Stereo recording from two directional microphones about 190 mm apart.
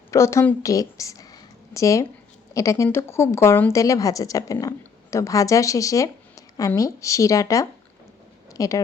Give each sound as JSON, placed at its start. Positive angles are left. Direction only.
{"t": 0.1, "sound": "a woman's voice", "side_deg": 15}